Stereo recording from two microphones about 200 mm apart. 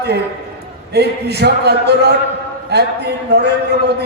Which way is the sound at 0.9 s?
55° right (ahead or behind).